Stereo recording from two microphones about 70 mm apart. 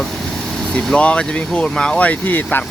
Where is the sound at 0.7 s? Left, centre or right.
Centre.